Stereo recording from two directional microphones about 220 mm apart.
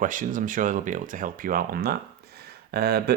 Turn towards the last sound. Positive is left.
turn(degrees=-45)  # may be behind; listen again after turning